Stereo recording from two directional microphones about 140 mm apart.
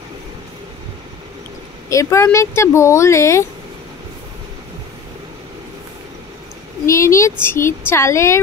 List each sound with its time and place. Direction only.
1.9 s speech: 20° left (ahead or behind)
6.9 s speech: 20° left (ahead or behind)